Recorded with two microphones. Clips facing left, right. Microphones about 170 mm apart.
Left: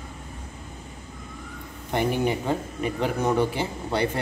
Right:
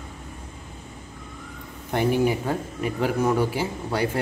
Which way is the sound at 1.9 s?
10° right (ahead or behind).